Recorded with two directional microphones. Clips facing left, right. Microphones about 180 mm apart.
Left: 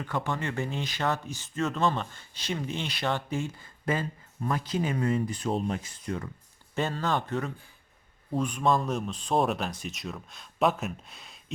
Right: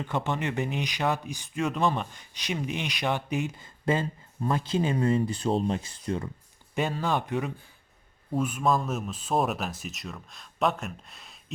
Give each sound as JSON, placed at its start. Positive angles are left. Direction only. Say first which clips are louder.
{"t": 0.0, "sound": "speech", "louder": "right 2 dB", "side_deg": -20}
{"t": 6.7, "sound": "speech", "louder": "right 1 dB", "side_deg": -10}